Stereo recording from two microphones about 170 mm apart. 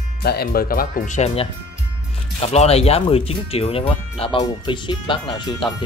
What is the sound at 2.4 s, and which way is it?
Speech, 40° left (ahead or behind).